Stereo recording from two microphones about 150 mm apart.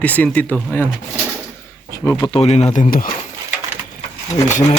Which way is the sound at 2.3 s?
45° left (ahead or behind).